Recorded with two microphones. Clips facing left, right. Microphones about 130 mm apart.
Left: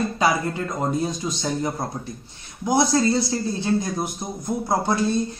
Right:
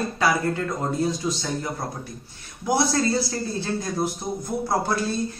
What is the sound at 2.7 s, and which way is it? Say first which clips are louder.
A man's voice: left 2 dB; 20° left (ahead or behind).